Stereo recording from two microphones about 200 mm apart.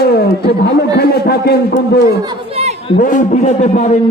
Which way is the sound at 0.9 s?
50° left (ahead or behind).